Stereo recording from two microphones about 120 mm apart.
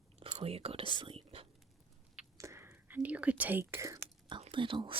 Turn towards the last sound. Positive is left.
turn(degrees=-45)  # may be behind; listen again after turning